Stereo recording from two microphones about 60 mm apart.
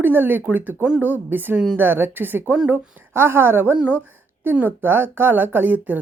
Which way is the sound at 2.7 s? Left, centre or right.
Right.